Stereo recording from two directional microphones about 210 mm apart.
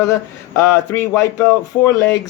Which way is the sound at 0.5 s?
15° left (ahead or behind).